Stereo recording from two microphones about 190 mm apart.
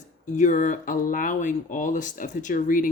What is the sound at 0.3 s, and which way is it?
Speech, 40° left (ahead or behind).